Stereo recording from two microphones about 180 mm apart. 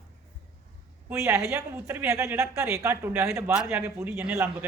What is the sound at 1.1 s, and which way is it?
A woman's voice, 15° right (ahead or behind).